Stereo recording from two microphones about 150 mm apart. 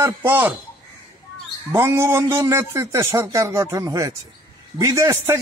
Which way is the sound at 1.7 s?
20° right (ahead or behind).